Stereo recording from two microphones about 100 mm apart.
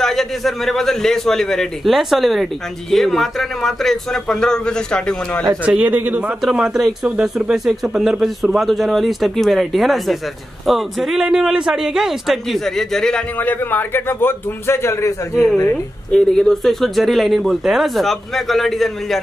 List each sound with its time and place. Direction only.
0.0 s speech: centre (ahead or behind)
5.7 s speech: 15° right (ahead or behind)
6.4 s speech: 5° right (ahead or behind)
13.4 s a man's voice: 20° left (ahead or behind)
16.1 s speech: 5° left (ahead or behind)